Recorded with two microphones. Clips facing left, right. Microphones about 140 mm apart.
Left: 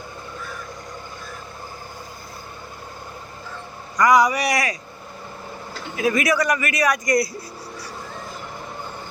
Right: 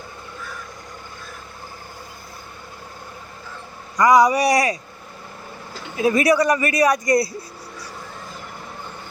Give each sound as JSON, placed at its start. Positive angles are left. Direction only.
{"t": 3.9, "sound": "a man's voice", "side_deg": -30}
{"t": 6.0, "sound": "a man's voice", "side_deg": -30}